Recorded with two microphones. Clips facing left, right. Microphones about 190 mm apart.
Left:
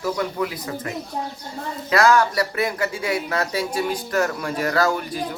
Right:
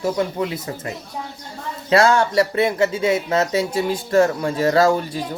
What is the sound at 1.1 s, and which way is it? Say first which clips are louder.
Speech: left 3 dB; 50° left (ahead or behind).